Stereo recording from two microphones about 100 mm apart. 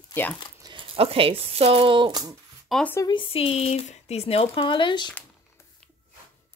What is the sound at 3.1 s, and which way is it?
Speech, 65° left (ahead or behind).